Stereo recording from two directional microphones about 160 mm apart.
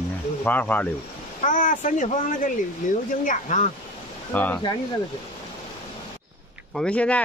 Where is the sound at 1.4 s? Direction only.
55° left (ahead or behind).